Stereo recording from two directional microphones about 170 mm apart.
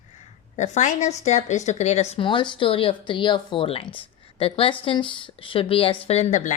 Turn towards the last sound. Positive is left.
turn(degrees=45)  # may be behind; listen again after turning